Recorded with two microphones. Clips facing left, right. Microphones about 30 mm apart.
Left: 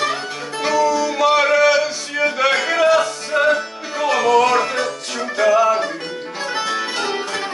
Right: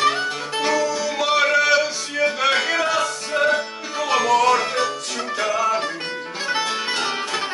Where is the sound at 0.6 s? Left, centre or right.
Centre.